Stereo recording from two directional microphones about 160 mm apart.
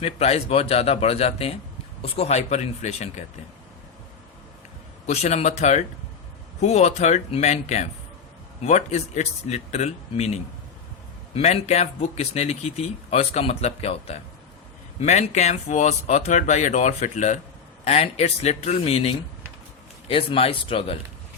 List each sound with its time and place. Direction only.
0.0 s speech: 40° left (ahead or behind)
5.0 s speech: 45° left (ahead or behind)